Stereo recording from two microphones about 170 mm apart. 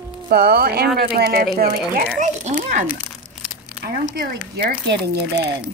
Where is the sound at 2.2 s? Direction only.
45° right (ahead or behind).